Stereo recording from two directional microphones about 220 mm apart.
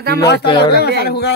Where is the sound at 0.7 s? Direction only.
45° left (ahead or behind).